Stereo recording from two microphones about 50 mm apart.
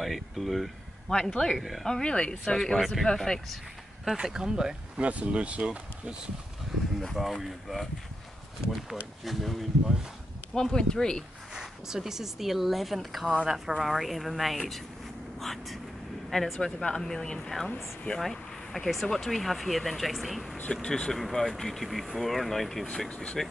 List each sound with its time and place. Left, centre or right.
0.0 s speech: centre
1.0 s speech: centre
1.6 s speech: centre
1.9 s speech: centre
2.4 s speech: centre
4.0 s speech: centre
5.0 s speech: right
7.4 s speech: centre
9.2 s speech: centre
10.5 s speech: centre
11.5 s speech: centre
20.7 s speech: centre
22.8 s speech: left